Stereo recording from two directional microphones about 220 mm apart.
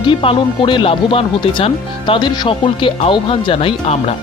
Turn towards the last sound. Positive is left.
turn(degrees=25)  # may be behind; listen again after turning